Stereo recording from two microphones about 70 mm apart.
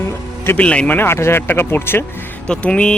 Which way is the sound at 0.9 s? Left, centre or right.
Left.